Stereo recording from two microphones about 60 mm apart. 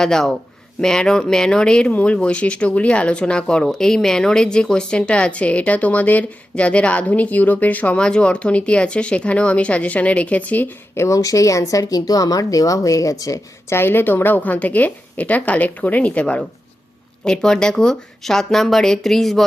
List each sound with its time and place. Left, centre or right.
0.0 s speech: centre
1.9 s speech: left
10.9 s speech: left
11.2 s a woman's voice: left
13.7 s speech: left
17.2 s speech: centre